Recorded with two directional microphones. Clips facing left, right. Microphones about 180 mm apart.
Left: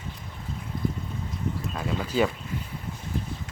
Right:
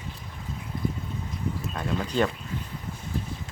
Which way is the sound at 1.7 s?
5° left (ahead or behind).